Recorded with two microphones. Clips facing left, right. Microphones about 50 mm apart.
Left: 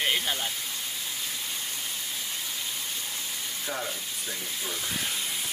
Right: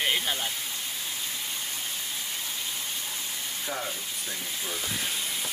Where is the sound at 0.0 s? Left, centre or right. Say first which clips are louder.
Even; centre.